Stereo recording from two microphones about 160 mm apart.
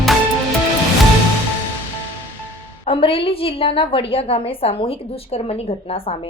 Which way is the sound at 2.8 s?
35° left (ahead or behind).